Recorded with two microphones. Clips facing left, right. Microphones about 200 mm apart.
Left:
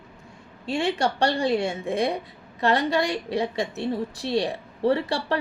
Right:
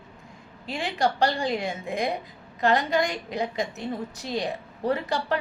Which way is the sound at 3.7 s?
30° left (ahead or behind).